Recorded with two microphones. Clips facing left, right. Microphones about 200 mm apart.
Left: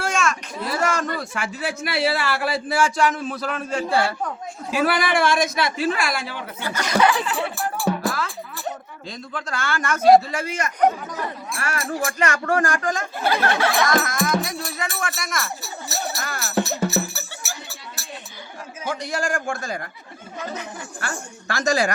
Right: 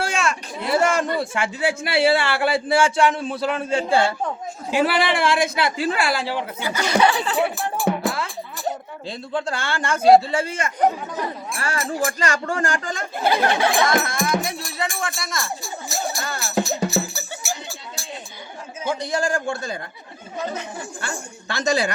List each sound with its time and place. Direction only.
0.0 s speech: 30° right (ahead or behind)
6.6 s speech: 10° right (ahead or behind)
7.0 s speech: 30° right (ahead or behind)
7.5 s music: 20° right (ahead or behind)
11.5 s speech: 30° right (ahead or behind)
13.2 s speech: 15° right (ahead or behind)
13.7 s speech: 25° right (ahead or behind)
16.4 s music: 15° right (ahead or behind)
18.9 s speech: 30° right (ahead or behind)